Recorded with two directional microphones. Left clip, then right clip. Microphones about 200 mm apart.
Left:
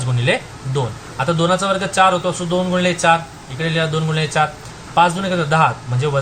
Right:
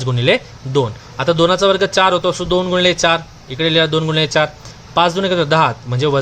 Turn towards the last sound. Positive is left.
turn(degrees=-50)  # may be behind; listen again after turning